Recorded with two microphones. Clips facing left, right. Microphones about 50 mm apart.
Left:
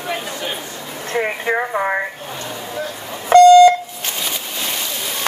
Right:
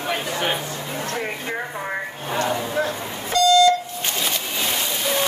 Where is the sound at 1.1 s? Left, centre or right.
Left.